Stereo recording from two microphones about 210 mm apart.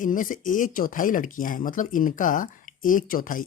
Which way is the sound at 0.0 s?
40° left (ahead or behind).